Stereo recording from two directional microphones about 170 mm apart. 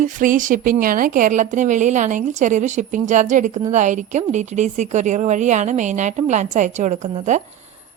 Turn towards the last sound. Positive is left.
turn(degrees=-45)  # may be behind; listen again after turning